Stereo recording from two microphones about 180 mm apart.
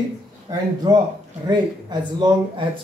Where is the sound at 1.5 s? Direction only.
25° right (ahead or behind).